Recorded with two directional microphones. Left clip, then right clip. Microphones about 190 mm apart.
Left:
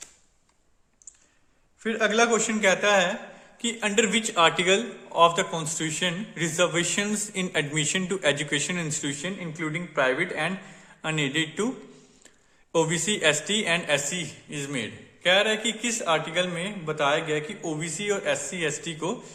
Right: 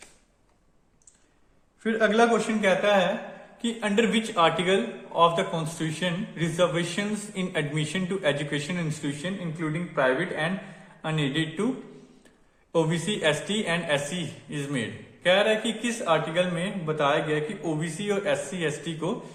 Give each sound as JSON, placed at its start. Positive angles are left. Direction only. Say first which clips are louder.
{"t": 1.8, "sound": "a man's voice", "louder": "right 1 dB", "side_deg": 35}
{"t": 12.7, "sound": "a man's voice", "louder": "left 1 dB", "side_deg": 35}